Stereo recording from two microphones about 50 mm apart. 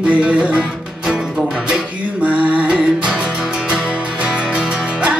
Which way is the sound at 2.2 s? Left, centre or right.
Right.